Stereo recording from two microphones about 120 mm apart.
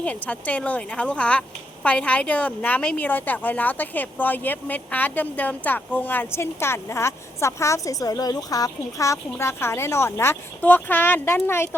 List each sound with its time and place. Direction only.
0.0 s a woman's voice: 10° left (ahead or behind)